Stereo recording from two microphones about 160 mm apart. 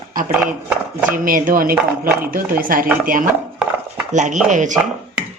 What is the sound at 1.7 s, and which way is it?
Speech, 10° right (ahead or behind).